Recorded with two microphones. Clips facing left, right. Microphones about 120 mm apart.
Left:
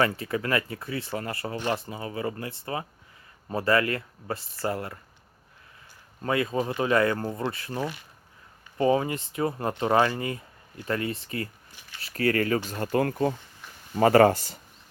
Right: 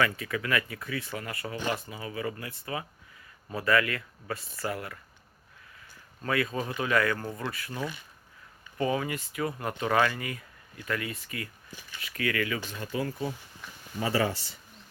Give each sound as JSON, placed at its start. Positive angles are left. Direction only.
{"t": 0.0, "sound": "speech", "side_deg": 30}
{"t": 6.2, "sound": "speech", "side_deg": 25}